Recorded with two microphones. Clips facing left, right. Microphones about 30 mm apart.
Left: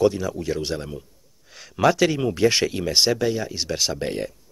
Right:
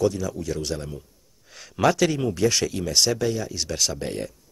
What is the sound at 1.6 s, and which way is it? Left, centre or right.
Speech, centre.